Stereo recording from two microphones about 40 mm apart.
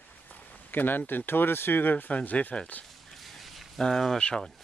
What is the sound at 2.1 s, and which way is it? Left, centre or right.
Speech, left.